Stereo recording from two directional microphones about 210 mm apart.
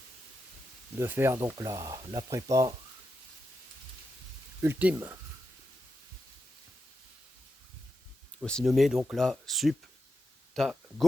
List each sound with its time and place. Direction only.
0.9 s speech: 10° right (ahead or behind)
4.6 s speech: 10° right (ahead or behind)
8.4 s speech: centre (ahead or behind)